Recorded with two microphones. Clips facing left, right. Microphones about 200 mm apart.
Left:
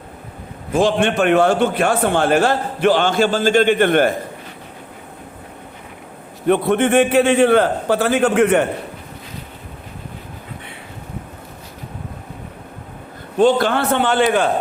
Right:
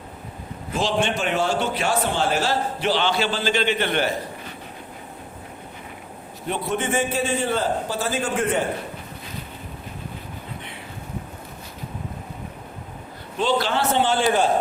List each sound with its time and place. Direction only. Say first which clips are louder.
0.7 s a man's voice: left 7 dB; 50° left (ahead or behind)
6.5 s a man's voice: left 10 dB; 60° left (ahead or behind)
13.3 s a man's voice: left 8 dB; 50° left (ahead or behind)